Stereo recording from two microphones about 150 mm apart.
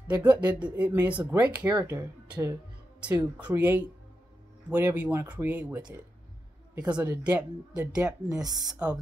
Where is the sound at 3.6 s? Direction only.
10° right (ahead or behind).